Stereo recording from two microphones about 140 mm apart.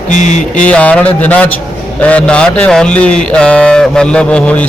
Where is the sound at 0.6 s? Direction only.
10° left (ahead or behind).